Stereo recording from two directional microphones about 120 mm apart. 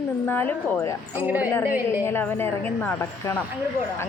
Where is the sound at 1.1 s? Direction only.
15° right (ahead or behind).